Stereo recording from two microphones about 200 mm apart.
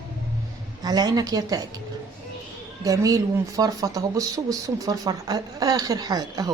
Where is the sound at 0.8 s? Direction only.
20° right (ahead or behind).